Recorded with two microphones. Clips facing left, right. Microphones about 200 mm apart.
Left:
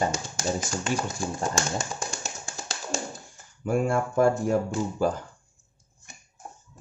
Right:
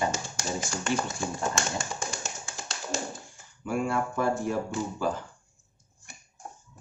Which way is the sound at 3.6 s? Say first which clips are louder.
Left 4 dB; 45° left (ahead or behind).